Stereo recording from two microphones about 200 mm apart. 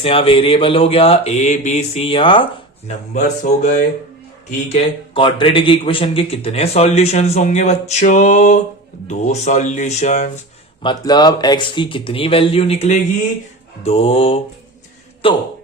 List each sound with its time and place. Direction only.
0.0 s mantra: 30° left (ahead or behind)
3.2 s speech: 40° left (ahead or behind)
4.7 s speech: 25° left (ahead or behind)
10.8 s mantra: 20° left (ahead or behind)